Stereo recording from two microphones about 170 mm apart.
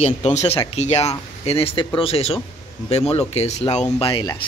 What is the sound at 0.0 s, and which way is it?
Speech, 40° left (ahead or behind).